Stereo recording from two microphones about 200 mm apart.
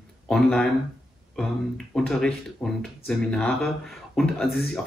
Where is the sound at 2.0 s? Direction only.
5° left (ahead or behind).